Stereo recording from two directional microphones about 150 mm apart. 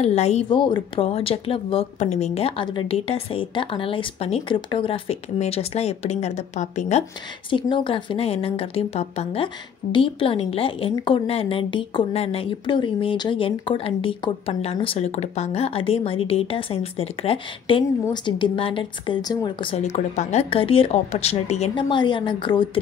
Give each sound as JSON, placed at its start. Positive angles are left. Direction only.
{"t": 0.0, "sound": "speech", "side_deg": 45}
{"t": 0.5, "sound": "speech", "side_deg": 30}
{"t": 7.7, "sound": "speech", "side_deg": 35}
{"t": 19.8, "sound": "speech", "side_deg": 50}
{"t": 21.7, "sound": "speech", "side_deg": 30}